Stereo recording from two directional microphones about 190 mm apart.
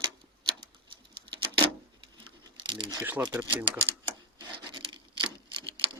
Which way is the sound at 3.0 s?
10° right (ahead or behind).